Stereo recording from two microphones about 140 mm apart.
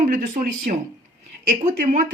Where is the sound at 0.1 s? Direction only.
75° right (ahead or behind).